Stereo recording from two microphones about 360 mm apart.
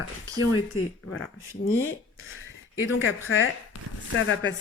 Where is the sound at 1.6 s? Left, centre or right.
Left.